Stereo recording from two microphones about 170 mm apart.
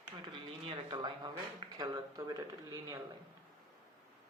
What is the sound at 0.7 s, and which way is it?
A man's voice, 25° right (ahead or behind).